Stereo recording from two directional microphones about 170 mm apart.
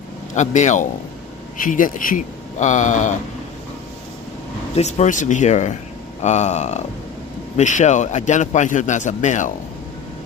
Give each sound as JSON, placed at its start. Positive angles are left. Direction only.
{"t": 0.3, "sound": "a man's voice", "side_deg": 45}
{"t": 4.7, "sound": "a man's voice", "side_deg": 40}